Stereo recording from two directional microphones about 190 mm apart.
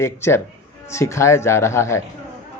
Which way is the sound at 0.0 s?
15° left (ahead or behind).